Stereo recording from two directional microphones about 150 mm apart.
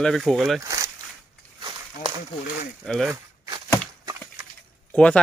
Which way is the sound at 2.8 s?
5° left (ahead or behind).